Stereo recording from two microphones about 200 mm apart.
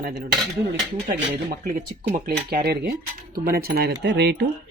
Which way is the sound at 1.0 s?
45° right (ahead or behind).